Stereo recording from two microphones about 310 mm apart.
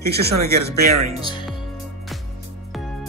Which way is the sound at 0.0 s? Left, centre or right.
Right.